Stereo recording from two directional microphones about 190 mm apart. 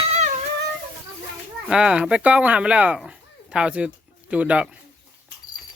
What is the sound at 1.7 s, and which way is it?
Speech, 5° right (ahead or behind).